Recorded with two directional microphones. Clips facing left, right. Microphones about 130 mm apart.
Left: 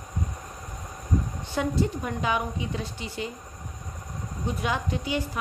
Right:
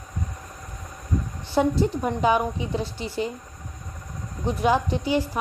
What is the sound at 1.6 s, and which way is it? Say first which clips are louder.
A woman's voice: right 5 dB; 35° right (ahead or behind).